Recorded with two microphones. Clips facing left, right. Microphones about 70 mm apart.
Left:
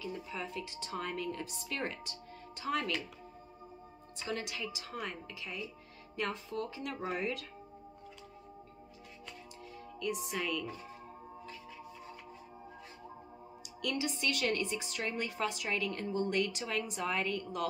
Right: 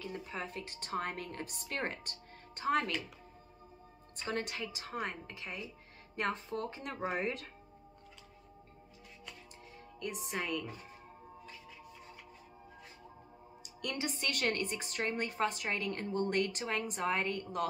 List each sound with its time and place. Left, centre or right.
0.0 s a woman's voice: right
4.3 s a woman's voice: right
10.3 s speech: right
13.7 s a woman's voice: right